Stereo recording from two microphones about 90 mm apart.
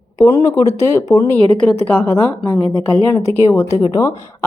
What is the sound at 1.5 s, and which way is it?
Speech, 15° left (ahead or behind).